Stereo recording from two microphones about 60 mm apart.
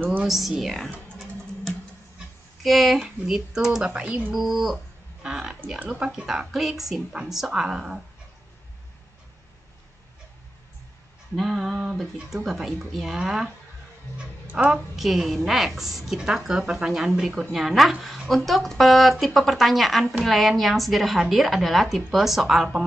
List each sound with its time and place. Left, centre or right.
0.3 s a woman's voice: centre
2.6 s a woman's voice: centre
4.3 s a woman's voice: centre
6.2 s a woman's voice: centre
11.3 s a sound: centre
12.4 s a woman's voice: centre
14.7 s a woman's voice: centre